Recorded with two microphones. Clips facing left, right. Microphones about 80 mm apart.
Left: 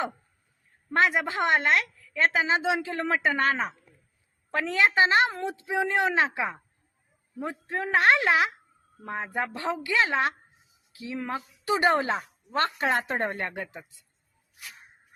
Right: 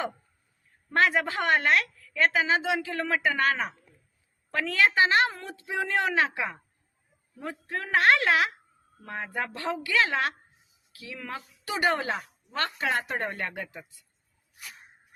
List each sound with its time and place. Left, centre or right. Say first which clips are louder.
0.9 s a woman's voice: even; centre